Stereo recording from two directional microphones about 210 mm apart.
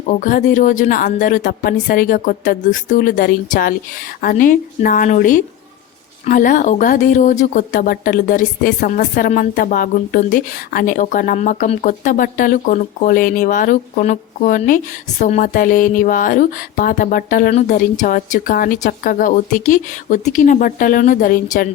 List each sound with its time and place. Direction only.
0.1 s speech: 40° left (ahead or behind)